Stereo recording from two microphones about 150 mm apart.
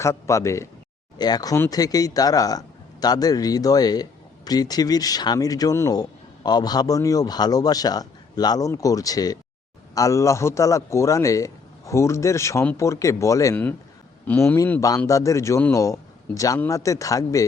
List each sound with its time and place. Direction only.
0.0 s speech: 20° left (ahead or behind)